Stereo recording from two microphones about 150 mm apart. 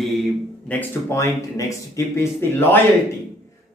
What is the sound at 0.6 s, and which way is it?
Speech, 15° left (ahead or behind).